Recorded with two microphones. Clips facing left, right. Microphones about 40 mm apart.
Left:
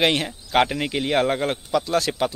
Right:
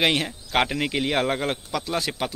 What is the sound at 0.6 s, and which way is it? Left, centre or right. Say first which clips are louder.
Speech: left 2 dB; centre.